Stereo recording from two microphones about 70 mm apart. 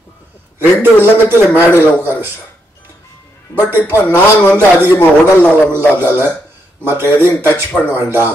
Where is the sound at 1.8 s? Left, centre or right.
Right.